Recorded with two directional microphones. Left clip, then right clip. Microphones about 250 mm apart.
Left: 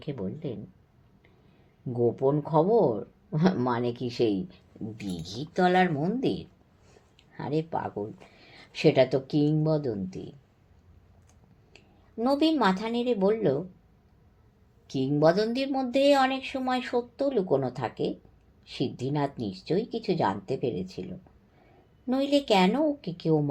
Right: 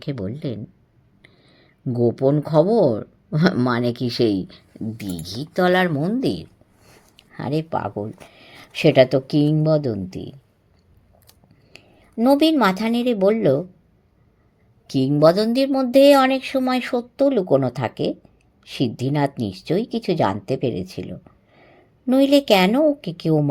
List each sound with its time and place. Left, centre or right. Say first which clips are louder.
0.0 s speech: right 7 dB; right
1.9 s speech: right 6 dB; right
14.8 s speech: right 8 dB; right